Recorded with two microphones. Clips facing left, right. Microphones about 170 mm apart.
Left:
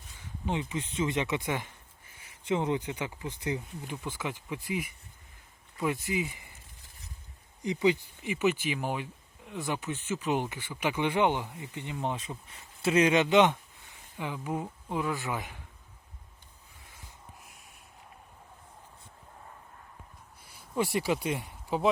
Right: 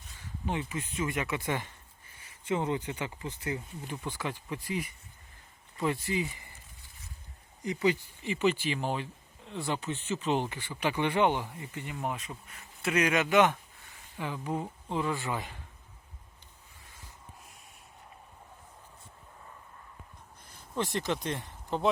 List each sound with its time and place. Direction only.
0.2 s speech: 15° left (ahead or behind)
7.6 s speech: 15° left (ahead or behind)
20.5 s speech: 10° left (ahead or behind)